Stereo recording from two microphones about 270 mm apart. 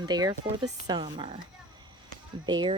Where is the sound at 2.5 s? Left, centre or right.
Centre.